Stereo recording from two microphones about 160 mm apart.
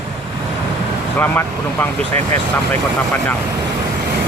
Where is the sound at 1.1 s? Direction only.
15° left (ahead or behind).